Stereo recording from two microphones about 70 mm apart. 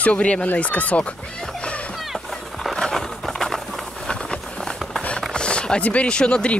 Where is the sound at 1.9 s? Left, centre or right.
Centre.